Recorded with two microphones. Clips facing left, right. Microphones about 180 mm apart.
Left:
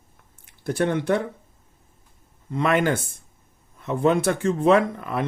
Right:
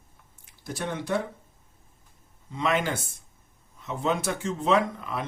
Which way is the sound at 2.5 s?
55° left (ahead or behind).